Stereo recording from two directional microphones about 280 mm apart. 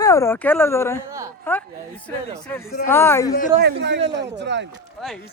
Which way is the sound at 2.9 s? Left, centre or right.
Centre.